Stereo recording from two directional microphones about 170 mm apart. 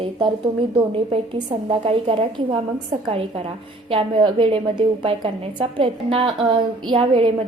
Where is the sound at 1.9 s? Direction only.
35° right (ahead or behind).